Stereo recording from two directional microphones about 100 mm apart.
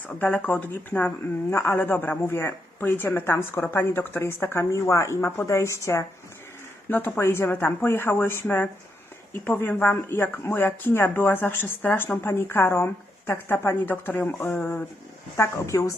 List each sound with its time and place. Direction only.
0.2 s speech: 15° left (ahead or behind)
15.4 s a woman's voice: 30° left (ahead or behind)